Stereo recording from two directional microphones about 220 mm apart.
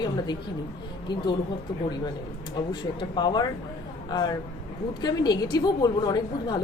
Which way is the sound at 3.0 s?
20° left (ahead or behind).